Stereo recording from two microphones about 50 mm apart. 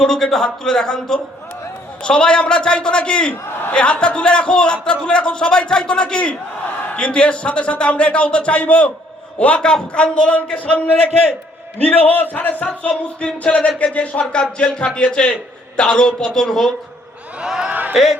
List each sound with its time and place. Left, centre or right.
0.0 s a man's voice: centre; by 8.9 s left
9.6 s a man's voice: centre
11.9 s speech: left
12.6 s a man's voice: left
17.4 s a man's voice: centre
17.7 s a man's voice: right
17.9 s a man's voice: centre